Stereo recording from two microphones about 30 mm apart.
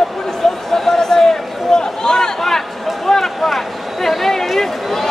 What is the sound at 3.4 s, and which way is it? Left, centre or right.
Speech, centre.